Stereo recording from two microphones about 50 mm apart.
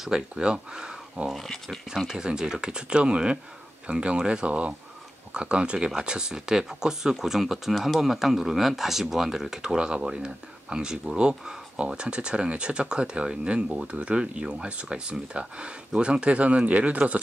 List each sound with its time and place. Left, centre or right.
0.0 s speech: centre
1.3 s speech: centre
2.0 s speech: centre